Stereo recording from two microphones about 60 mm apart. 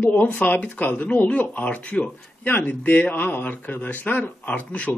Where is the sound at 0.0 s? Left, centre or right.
Left.